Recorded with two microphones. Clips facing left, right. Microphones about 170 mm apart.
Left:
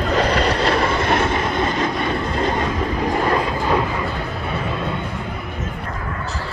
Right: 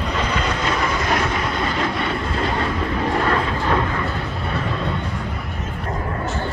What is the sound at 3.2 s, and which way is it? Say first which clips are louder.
Vehicle: left 1 dB; 15° left (ahead or behind).